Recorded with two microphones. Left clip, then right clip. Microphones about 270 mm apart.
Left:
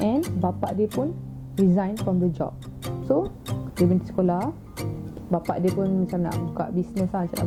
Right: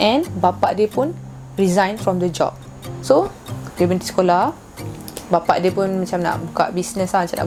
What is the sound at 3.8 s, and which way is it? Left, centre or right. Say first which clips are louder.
Speech: right 6 dB; centre.